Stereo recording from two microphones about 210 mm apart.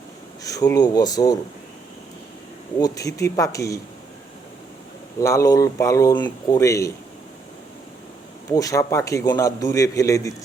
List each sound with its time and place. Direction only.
0.4 s a man's voice: 15° left (ahead or behind)
2.8 s a man's voice: 15° left (ahead or behind)
5.2 s a man's voice: 15° left (ahead or behind)
8.4 s a man's voice: 15° left (ahead or behind)